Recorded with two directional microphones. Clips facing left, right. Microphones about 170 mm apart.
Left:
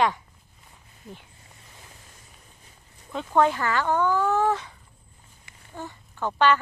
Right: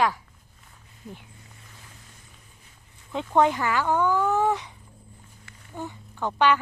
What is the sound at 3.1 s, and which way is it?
Speech, 15° right (ahead or behind).